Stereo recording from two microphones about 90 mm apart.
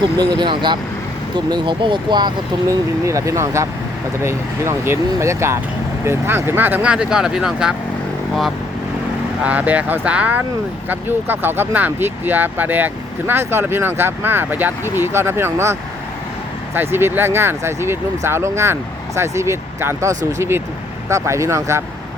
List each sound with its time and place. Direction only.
0.2 s speech: 55° right (ahead or behind)
2.6 s speech: 35° right (ahead or behind)
6.9 s speech: 10° right (ahead or behind)
9.4 s speech: 15° right (ahead or behind); by 21.8 s 35° right (ahead or behind)